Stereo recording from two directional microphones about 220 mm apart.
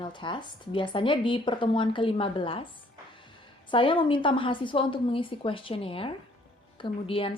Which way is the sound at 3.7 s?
25° left (ahead or behind).